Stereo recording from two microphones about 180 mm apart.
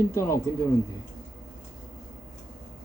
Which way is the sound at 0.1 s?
15° left (ahead or behind).